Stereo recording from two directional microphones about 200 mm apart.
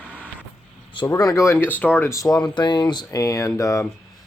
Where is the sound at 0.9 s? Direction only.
20° left (ahead or behind).